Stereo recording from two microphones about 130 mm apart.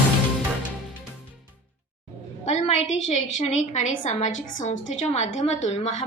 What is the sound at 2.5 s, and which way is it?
A woman's voice, 55° left (ahead or behind).